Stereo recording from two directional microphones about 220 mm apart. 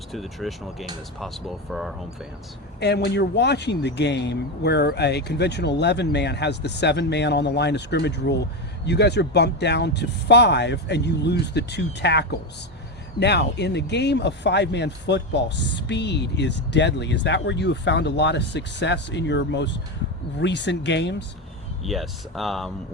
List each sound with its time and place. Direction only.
0.1 s speech: centre (ahead or behind)
2.8 s speech: 50° left (ahead or behind)
21.8 s speech: centre (ahead or behind)